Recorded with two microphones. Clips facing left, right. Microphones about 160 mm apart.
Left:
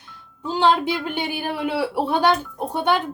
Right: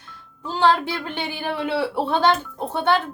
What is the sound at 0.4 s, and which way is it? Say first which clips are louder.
A woman's voice: left 1 dB; 15° left (ahead or behind).